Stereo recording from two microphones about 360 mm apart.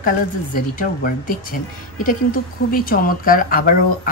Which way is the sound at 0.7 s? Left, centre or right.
Left.